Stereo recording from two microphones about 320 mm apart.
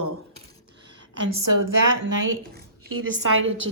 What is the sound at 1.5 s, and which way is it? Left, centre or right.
Speech, right.